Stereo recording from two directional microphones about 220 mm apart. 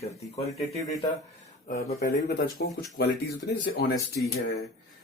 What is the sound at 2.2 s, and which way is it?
Speech, 45° left (ahead or behind).